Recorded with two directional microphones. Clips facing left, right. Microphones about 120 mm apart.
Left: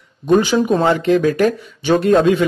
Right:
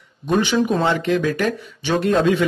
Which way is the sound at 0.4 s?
40° left (ahead or behind).